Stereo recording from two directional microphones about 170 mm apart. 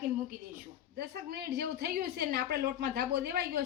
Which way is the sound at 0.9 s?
65° right (ahead or behind).